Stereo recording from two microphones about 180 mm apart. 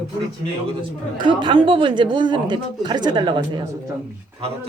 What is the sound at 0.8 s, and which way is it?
Speech, 25° right (ahead or behind).